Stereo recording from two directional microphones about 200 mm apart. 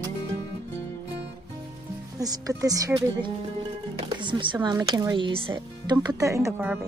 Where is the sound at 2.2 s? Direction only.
20° right (ahead or behind).